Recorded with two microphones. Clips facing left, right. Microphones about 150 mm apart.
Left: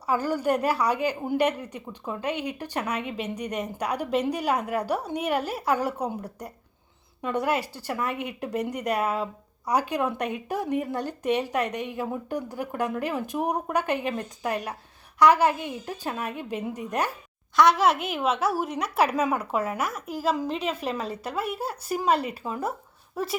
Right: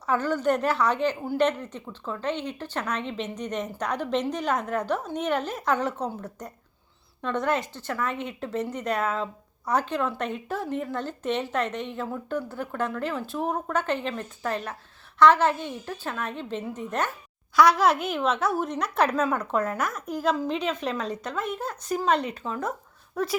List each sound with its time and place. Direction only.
0.0 s speech: 10° left (ahead or behind)
17.6 s speech: centre (ahead or behind)